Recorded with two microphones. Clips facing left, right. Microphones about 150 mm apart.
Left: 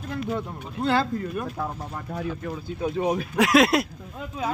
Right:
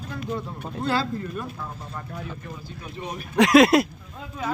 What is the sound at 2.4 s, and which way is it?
Speech, 80° left.